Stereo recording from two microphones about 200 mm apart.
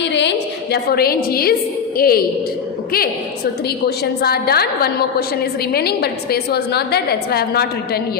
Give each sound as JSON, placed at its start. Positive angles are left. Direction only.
{"t": 0.0, "sound": "a woman's voice", "side_deg": 60}